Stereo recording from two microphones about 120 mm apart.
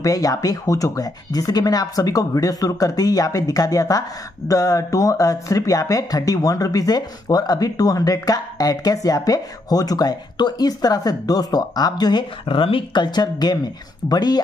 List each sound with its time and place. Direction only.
0.0 s speech: 30° left (ahead or behind)